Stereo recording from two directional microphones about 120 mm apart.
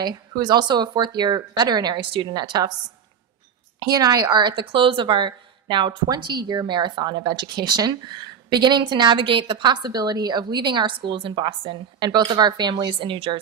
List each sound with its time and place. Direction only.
0.0 s a woman's voice: 35° right (ahead or behind)
3.8 s a woman's voice: 30° right (ahead or behind)
13.0 s a woman's voice: 45° right (ahead or behind)